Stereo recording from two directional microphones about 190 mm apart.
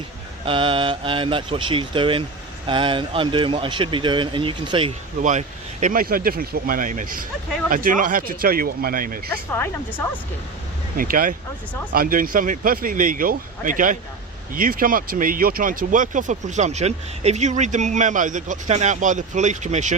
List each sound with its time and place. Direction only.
0.4 s speech: 25° right (ahead or behind)
5.2 s speech: 40° right (ahead or behind)
10.9 s speech: 50° right (ahead or behind)